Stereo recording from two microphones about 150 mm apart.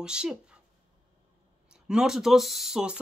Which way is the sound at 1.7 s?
5° right (ahead or behind).